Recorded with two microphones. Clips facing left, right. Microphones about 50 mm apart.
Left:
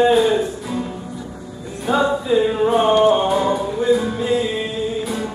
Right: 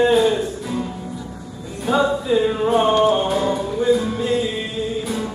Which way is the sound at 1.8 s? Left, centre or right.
Centre.